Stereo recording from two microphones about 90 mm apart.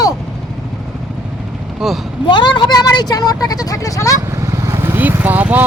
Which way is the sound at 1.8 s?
5° right (ahead or behind).